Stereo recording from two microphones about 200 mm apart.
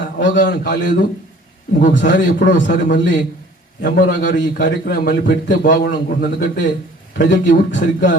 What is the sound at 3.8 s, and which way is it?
A man's voice, 45° left (ahead or behind).